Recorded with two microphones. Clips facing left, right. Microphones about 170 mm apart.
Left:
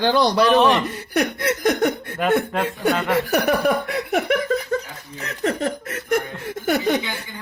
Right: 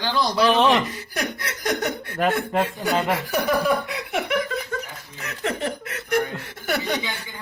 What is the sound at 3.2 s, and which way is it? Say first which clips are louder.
Speech: left 3 dB; 70° left (ahead or behind).